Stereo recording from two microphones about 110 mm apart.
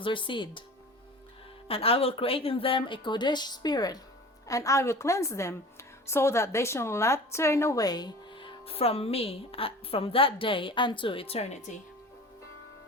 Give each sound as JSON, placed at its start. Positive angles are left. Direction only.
{"t": 0.0, "sound": "a woman's voice", "side_deg": 50}
{"t": 1.6, "sound": "a woman's voice", "side_deg": 60}